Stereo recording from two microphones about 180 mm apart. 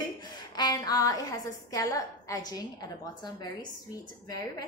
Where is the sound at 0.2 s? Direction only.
25° left (ahead or behind).